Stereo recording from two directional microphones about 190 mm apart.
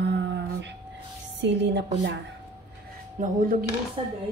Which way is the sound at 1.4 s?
65° right (ahead or behind).